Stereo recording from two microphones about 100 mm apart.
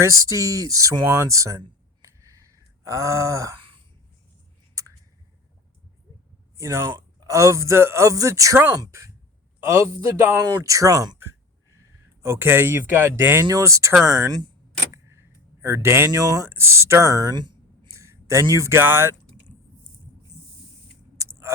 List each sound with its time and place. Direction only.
0.0 s speech: 30° right (ahead or behind)
2.0 s a sound: 35° right (ahead or behind)
4.8 s a sound: 30° right (ahead or behind)
6.6 s speech: 35° right (ahead or behind)
9.6 s speech: 25° right (ahead or behind)
10.3 s speech: 35° right (ahead or behind)
12.2 s speech: 25° right (ahead or behind); by 14.5 s 40° right (ahead or behind)
15.1 s a sound: 25° right (ahead or behind)
16.2 s speech: 40° right (ahead or behind)
16.5 s speech: 25° right (ahead or behind)
17.3 s speech: 50° right (ahead or behind)
17.9 s speech: 30° right (ahead or behind)
21.2 s a sound: 25° right (ahead or behind)